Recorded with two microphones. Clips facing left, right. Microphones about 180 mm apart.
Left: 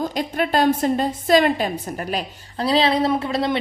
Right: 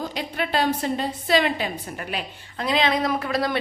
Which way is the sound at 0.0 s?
45° left (ahead or behind).